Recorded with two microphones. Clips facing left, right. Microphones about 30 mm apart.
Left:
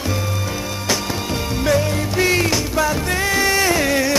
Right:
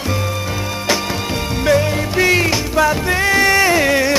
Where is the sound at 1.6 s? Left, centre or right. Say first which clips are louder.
Right 4 dB; centre.